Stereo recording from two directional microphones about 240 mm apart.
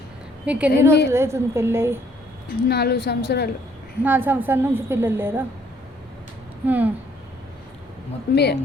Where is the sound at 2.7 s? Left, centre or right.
Left.